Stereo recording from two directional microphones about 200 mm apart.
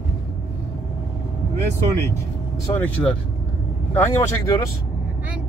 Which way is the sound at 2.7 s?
5° left (ahead or behind).